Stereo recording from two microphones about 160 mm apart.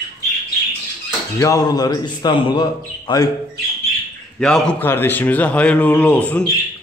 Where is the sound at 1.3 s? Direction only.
20° left (ahead or behind).